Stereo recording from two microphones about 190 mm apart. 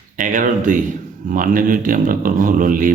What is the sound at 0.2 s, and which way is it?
A man's voice, 45° right (ahead or behind).